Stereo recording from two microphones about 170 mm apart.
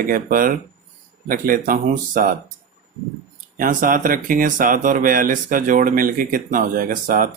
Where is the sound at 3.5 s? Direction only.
55° right (ahead or behind).